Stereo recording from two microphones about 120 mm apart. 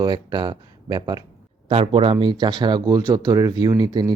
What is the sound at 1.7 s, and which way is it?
Speech, 55° right (ahead or behind).